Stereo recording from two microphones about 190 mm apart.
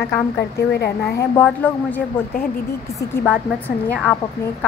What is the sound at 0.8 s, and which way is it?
Speech, 55° left (ahead or behind).